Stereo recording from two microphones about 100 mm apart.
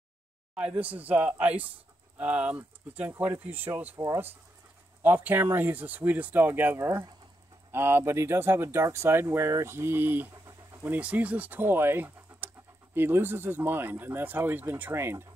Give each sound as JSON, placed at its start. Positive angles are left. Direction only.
{"t": 0.6, "sound": "speech", "side_deg": -15}
{"t": 5.0, "sound": "speech", "side_deg": -20}